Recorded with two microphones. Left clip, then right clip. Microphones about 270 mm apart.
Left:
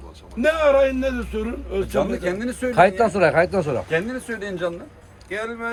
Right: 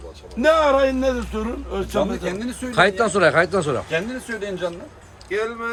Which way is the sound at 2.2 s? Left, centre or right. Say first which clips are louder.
Left 3 dB; centre.